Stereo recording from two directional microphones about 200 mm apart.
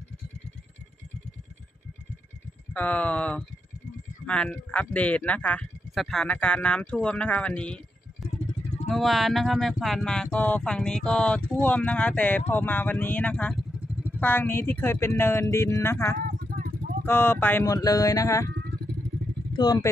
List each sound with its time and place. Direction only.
2.7 s speech: 5° left (ahead or behind)
14.2 s speech: 10° left (ahead or behind)
16.2 s vehicle: 45° right (ahead or behind)
17.0 s speech: 10° left (ahead or behind)
19.5 s speech: 20° left (ahead or behind)